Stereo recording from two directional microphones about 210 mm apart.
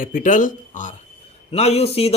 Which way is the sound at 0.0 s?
40° left (ahead or behind).